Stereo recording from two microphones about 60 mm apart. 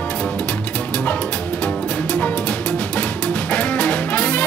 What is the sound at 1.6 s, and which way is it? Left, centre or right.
Music, left.